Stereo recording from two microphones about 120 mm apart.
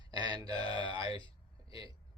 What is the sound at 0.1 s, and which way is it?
Mantra, 35° right (ahead or behind).